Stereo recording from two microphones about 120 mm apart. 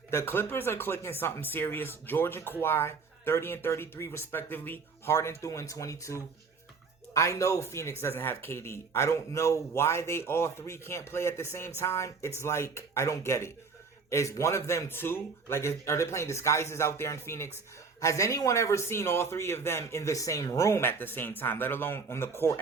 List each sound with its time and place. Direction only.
0.1 s speech: 20° left (ahead or behind)